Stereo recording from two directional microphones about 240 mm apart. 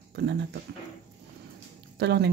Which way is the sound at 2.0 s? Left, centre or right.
Right.